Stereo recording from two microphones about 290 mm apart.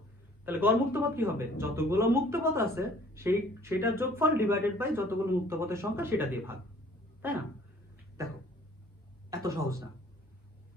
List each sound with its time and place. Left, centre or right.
0.4 s speech: centre